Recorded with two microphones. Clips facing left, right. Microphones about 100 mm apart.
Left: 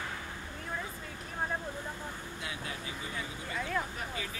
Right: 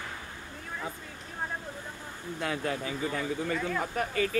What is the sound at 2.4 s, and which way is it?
Speech, 55° right (ahead or behind).